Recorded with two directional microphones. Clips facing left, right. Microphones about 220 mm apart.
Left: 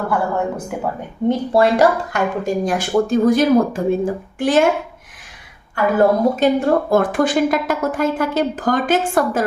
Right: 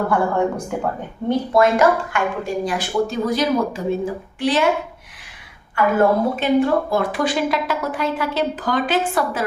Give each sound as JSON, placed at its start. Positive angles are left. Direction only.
{"t": 0.1, "sound": "speech", "side_deg": 5}
{"t": 1.2, "sound": "speech", "side_deg": 15}
{"t": 1.5, "sound": "a woman's voice", "side_deg": 35}
{"t": 5.7, "sound": "a woman's voice", "side_deg": 40}